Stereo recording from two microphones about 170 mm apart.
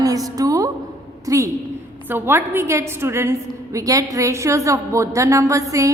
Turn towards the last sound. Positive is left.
turn(degrees=-20)  # may be behind; listen again after turning